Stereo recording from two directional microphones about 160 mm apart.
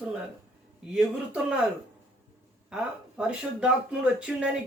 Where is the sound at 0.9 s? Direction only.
5° right (ahead or behind).